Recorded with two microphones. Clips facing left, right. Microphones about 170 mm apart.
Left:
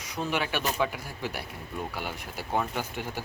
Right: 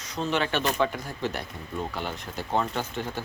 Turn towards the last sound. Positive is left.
turn(degrees=10)  # may be behind; listen again after turning